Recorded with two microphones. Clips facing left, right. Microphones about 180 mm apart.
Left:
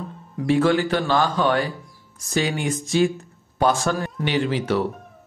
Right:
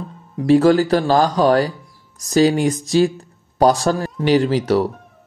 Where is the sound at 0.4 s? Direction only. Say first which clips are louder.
Right 6 dB; 40° right (ahead or behind).